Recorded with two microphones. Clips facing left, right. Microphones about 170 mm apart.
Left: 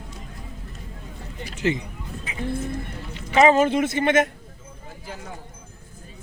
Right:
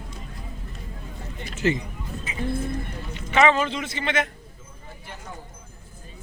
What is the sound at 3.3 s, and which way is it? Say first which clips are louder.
Speech: left 4 dB; 40° left (ahead or behind).